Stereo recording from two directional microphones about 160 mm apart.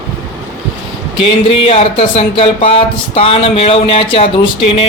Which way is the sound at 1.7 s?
40° left (ahead or behind).